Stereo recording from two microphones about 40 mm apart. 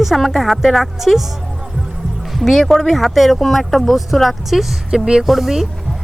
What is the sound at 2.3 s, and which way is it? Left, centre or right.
Speech, centre.